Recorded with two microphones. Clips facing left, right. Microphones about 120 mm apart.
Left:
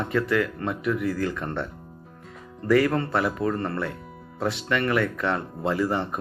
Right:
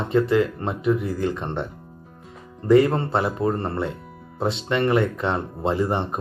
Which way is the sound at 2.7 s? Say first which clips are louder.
Right 4 dB; 25° right (ahead or behind).